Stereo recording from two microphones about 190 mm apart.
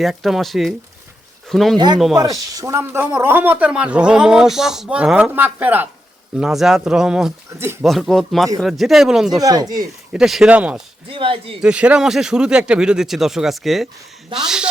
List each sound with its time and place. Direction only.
0.0 s speech: centre (ahead or behind)
2.1 s speech: 20° right (ahead or behind)
7.9 s speech: centre (ahead or behind)
9.4 s speech: 20° right (ahead or behind)
10.1 s speech: 5° right (ahead or behind)
11.1 s speech: 30° right (ahead or behind)
11.6 s speech: 5° right (ahead or behind)